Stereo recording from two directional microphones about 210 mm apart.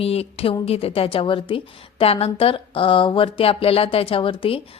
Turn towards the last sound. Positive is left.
turn(degrees=25)  # may be behind; listen again after turning